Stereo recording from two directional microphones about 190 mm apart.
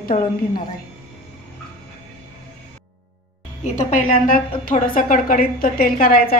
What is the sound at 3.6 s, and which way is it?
A woman's voice, 45° left (ahead or behind).